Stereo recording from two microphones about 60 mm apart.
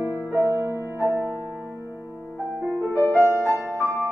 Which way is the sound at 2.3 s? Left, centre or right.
Right.